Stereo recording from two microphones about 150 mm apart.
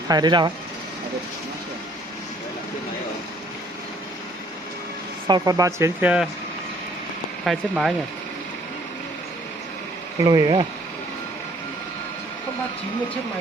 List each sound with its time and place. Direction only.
0.1 s speech: 30° right (ahead or behind)
5.3 s speech: 25° right (ahead or behind)
7.4 s speech: centre (ahead or behind)
10.2 s speech: 25° right (ahead or behind)